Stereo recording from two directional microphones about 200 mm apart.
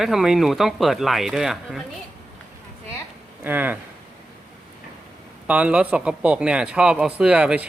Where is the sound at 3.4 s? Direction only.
10° right (ahead or behind).